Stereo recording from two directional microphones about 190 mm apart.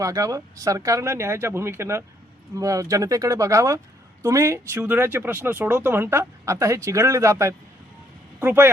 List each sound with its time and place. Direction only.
0.0 s speech: 20° right (ahead or behind)